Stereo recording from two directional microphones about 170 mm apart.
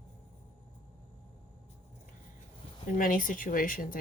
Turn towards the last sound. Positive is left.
turn(degrees=55)  # may be behind; listen again after turning